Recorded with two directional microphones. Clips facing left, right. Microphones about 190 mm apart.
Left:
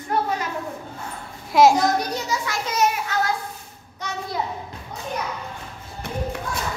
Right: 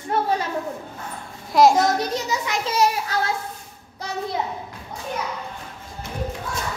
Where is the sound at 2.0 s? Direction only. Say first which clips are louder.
Right 1 dB; 20° right (ahead or behind).